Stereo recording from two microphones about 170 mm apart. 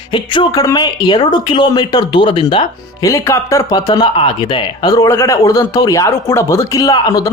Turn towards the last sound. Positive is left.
turn(degrees=25)  # may be behind; listen again after turning